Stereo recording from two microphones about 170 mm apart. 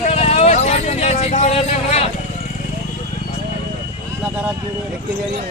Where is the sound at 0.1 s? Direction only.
40° left (ahead or behind).